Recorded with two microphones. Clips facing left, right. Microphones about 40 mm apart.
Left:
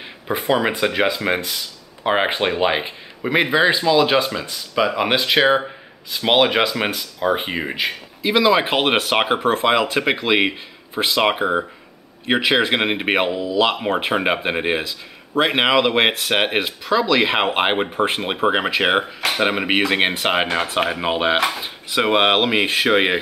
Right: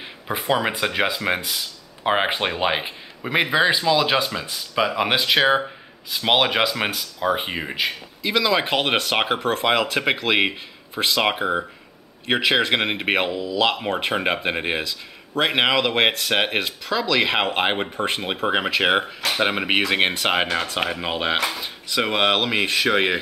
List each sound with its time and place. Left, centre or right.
0.0 s speech: centre
21.5 s dishes: centre